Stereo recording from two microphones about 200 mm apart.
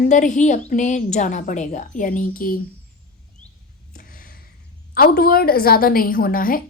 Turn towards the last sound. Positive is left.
turn(degrees=45)  # may be behind; listen again after turning